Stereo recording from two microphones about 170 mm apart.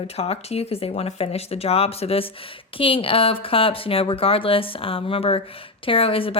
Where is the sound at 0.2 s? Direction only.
40° left (ahead or behind).